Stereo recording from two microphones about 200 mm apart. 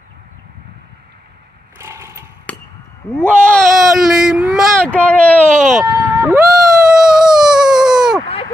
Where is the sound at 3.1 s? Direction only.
5° left (ahead or behind).